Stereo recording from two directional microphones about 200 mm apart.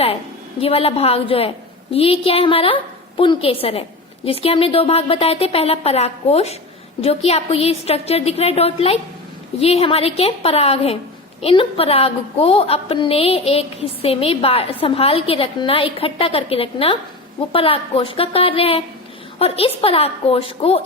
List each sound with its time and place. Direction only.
0.6 s a woman's voice: 30° left (ahead or behind)